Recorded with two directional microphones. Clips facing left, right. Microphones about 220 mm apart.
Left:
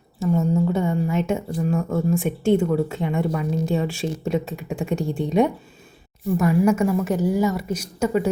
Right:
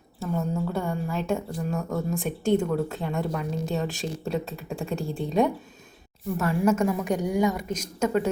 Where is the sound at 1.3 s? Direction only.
Centre (ahead or behind).